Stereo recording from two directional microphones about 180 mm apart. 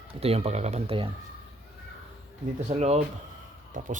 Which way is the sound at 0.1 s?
35° right (ahead or behind).